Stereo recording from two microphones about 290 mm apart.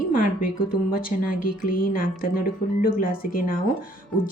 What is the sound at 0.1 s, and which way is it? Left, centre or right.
Speech, left.